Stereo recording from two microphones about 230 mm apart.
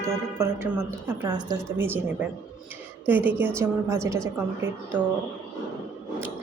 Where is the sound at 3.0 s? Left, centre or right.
Centre.